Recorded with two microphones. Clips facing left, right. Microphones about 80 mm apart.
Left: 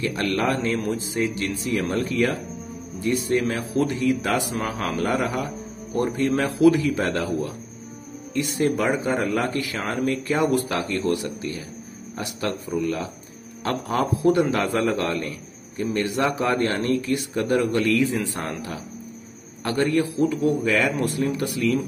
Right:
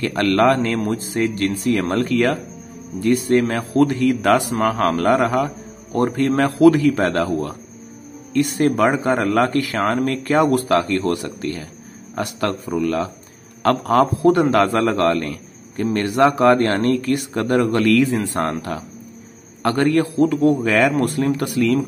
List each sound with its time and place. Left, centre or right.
0.0 s a man's voice: right
3.0 s a man's voice: right